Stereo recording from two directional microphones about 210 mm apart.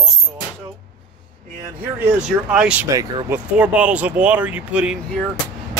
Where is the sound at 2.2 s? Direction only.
5° right (ahead or behind).